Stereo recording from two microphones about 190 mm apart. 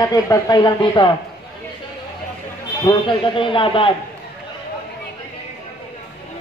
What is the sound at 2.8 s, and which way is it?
Speech, 25° left (ahead or behind).